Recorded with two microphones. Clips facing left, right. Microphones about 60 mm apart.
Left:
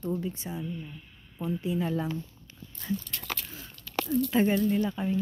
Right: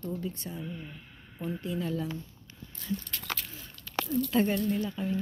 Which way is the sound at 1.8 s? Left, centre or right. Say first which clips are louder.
Left 3 dB; left.